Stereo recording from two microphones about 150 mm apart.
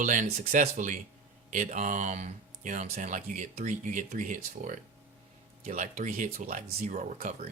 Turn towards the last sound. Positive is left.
turn(degrees=-55)  # may be behind; listen again after turning